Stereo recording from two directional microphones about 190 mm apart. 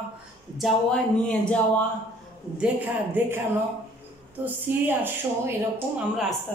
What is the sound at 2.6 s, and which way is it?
Speech, 10° right (ahead or behind).